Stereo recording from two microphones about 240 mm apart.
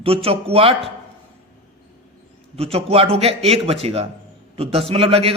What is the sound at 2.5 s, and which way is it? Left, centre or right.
Speech, right.